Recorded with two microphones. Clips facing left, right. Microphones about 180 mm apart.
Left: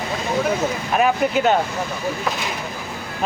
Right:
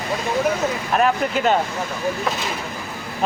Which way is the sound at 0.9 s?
5° left (ahead or behind).